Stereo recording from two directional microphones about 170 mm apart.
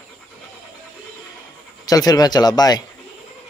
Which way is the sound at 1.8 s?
20° left (ahead or behind).